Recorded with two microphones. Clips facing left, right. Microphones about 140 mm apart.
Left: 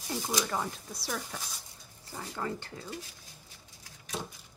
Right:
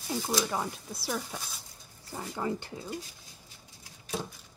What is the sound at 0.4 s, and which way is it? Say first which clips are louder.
Speech: right 1 dB; 5° right (ahead or behind).